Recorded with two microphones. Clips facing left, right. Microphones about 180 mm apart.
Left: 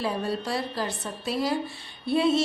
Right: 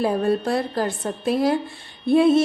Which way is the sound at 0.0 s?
50° right (ahead or behind).